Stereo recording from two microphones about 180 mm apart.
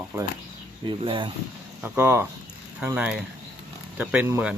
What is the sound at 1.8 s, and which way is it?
Speech, 10° right (ahead or behind).